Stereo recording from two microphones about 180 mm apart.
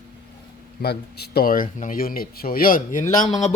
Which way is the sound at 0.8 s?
65° left (ahead or behind).